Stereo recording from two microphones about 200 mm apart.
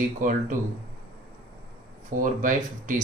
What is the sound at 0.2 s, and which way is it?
Speech, 40° right (ahead or behind).